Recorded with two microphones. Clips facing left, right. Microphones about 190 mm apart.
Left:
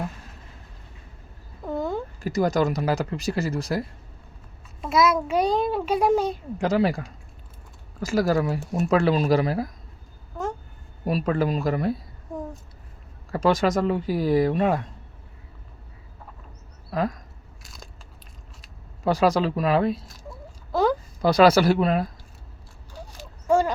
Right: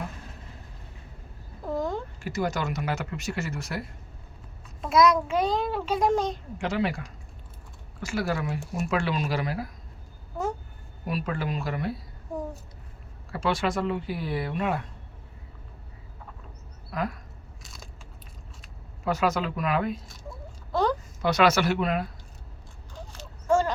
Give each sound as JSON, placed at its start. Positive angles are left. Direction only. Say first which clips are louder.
{"t": 1.6, "sound": "a sound", "louder": "left 2 dB", "side_deg": 0}
{"t": 2.2, "sound": "speech", "louder": "left 8 dB", "side_deg": 40}
{"t": 4.8, "sound": "a child's voice", "louder": "even", "side_deg": 5}
{"t": 6.6, "sound": "speech", "louder": "left 6 dB", "side_deg": 40}
{"t": 8.0, "sound": "speech", "louder": "left 7 dB", "side_deg": 40}
{"t": 11.0, "sound": "speech", "louder": "left 7 dB", "side_deg": 40}
{"t": 13.3, "sound": "speech", "louder": "left 6 dB", "side_deg": 40}
{"t": 16.9, "sound": "speech", "louder": "left 5 dB", "side_deg": 30}
{"t": 17.6, "sound": "biting", "louder": "left 2 dB", "side_deg": 0}
{"t": 19.0, "sound": "speech", "louder": "left 5 dB", "side_deg": 35}
{"t": 21.2, "sound": "speech", "louder": "left 6 dB", "side_deg": 35}
{"t": 23.0, "sound": "a sound", "louder": "left 2 dB", "side_deg": 10}